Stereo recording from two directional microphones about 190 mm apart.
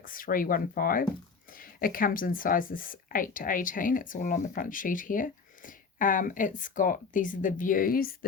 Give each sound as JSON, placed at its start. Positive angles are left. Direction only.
{"t": 0.0, "sound": "a woman's voice", "side_deg": 45}